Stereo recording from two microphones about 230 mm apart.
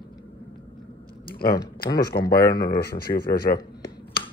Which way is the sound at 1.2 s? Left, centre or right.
Left.